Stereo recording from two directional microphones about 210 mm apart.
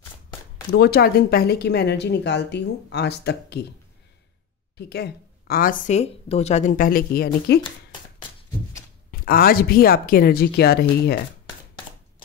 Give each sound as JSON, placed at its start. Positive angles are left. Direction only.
{"t": 0.7, "sound": "speech", "side_deg": 45}
{"t": 4.7, "sound": "speech", "side_deg": 50}
{"t": 9.1, "sound": "speech", "side_deg": 45}